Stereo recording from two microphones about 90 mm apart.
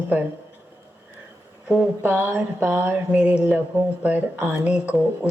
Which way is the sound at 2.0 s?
20° right (ahead or behind).